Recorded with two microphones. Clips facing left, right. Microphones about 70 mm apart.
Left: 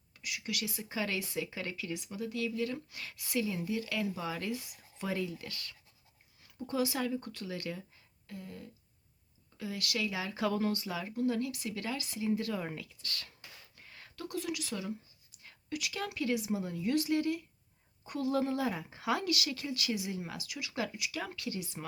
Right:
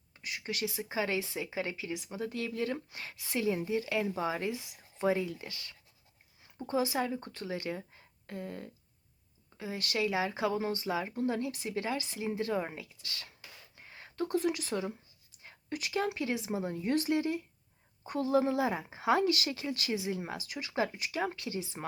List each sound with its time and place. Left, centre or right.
0.1 s speech: right
8.3 s a sound: right
9.6 s speech: right